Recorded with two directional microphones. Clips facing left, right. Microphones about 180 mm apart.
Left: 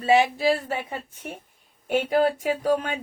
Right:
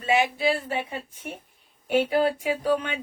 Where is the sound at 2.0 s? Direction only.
40° left (ahead or behind).